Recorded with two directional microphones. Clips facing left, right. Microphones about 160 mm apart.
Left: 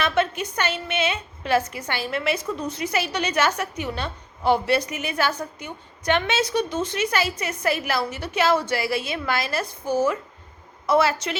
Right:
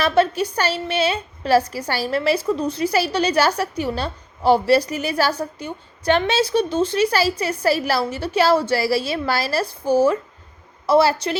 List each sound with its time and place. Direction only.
0.0 s a woman's voice: 35° right (ahead or behind)